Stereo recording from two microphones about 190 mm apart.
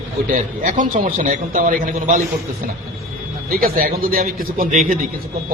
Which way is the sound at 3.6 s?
50° right (ahead or behind).